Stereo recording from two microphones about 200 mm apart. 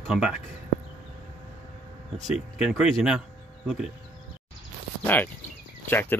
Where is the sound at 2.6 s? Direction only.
5° right (ahead or behind).